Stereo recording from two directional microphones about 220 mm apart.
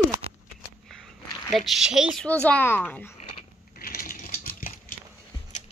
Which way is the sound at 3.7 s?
40° left (ahead or behind).